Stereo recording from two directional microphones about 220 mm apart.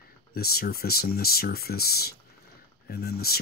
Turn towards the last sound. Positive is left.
turn(degrees=45)  # may be behind; listen again after turning